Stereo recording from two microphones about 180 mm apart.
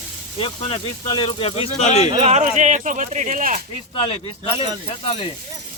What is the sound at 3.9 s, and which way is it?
Speech, 30° left (ahead or behind).